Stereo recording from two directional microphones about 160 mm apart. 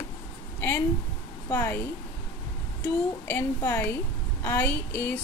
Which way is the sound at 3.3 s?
10° left (ahead or behind).